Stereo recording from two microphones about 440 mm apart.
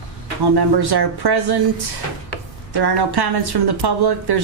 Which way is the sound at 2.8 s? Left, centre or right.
Right.